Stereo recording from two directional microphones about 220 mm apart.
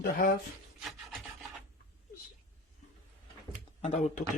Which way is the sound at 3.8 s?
30° left (ahead or behind).